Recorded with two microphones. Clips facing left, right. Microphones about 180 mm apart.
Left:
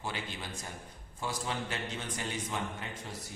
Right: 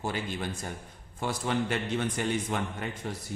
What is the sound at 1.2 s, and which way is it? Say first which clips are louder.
A man's voice: right 7 dB; 60° right (ahead or behind).